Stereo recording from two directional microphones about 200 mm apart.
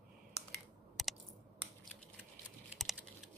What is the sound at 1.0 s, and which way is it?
Computer keyboard, centre (ahead or behind).